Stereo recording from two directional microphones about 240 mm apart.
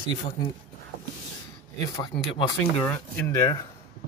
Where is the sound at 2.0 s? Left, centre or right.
Centre.